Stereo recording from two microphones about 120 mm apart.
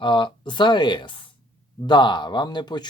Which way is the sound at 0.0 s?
40° left (ahead or behind).